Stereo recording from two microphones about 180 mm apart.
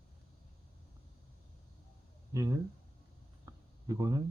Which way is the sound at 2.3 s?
15° right (ahead or behind).